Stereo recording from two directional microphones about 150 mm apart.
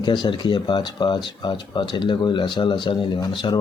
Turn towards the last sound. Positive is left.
turn(degrees=30)  # may be behind; listen again after turning